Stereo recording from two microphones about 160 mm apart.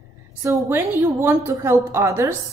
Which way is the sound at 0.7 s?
15° right (ahead or behind).